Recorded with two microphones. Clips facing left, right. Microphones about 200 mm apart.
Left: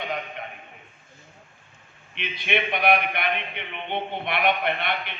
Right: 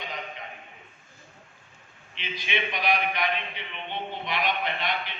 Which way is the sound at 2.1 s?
60° left (ahead or behind).